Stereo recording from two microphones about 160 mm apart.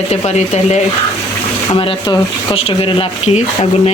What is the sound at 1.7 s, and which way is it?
Rub, 30° left (ahead or behind).